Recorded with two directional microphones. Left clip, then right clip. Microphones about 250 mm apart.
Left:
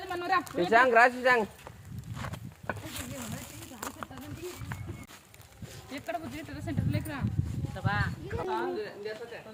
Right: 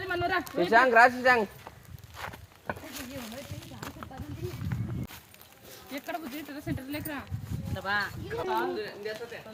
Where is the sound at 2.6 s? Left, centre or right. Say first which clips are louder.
Even; left.